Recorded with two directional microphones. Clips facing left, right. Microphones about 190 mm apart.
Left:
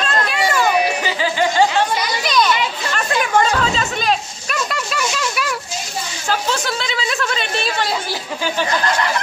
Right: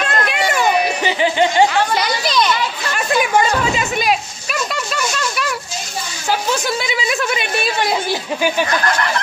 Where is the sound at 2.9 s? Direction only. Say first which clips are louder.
Right 2 dB; 10° right (ahead or behind).